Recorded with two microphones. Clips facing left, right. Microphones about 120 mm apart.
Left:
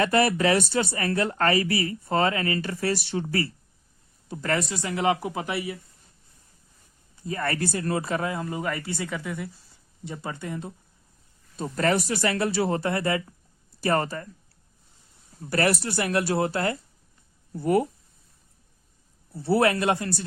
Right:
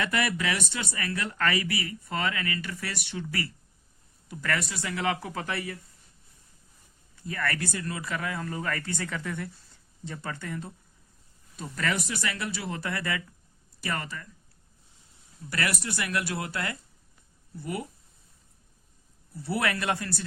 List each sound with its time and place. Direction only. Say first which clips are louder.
0.0 s speech: left 7 dB; 35° left (ahead or behind); by 5.7 s 15° left (ahead or behind)
7.3 s speech: left 4 dB; 25° left (ahead or behind)
11.5 s speech: left 7 dB; 35° left (ahead or behind)
15.4 s speech: left 7 dB; 35° left (ahead or behind)
17.5 s speech: left 12 dB; 45° left (ahead or behind)
19.3 s speech: left 8 dB; 30° left (ahead or behind)